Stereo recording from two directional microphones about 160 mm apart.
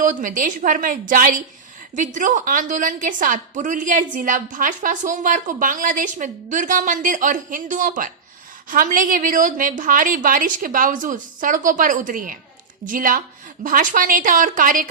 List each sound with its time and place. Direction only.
0.0 s a woman's voice: 55° right (ahead or behind)